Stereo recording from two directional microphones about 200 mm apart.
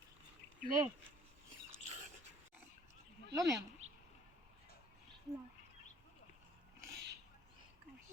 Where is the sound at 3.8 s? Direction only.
35° right (ahead or behind).